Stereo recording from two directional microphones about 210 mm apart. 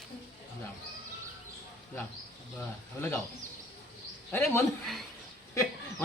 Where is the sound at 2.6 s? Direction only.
10° left (ahead or behind).